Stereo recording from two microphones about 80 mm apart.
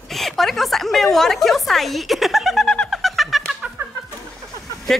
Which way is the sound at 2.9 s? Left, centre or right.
Centre.